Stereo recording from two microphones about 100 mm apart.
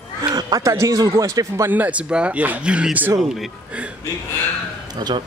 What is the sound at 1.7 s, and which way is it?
Speech, 15° right (ahead or behind).